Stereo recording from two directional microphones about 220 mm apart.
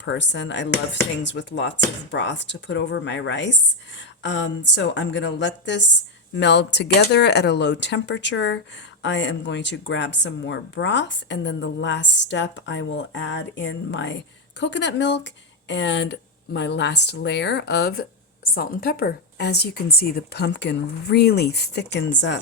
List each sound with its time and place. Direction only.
0.0 s speech: 55° left (ahead or behind)